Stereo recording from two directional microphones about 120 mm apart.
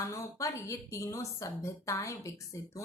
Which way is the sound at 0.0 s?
25° left (ahead or behind).